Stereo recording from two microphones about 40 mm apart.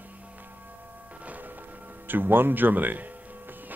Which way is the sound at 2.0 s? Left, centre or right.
Right.